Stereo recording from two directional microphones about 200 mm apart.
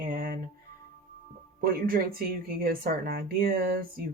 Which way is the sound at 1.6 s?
45° right (ahead or behind).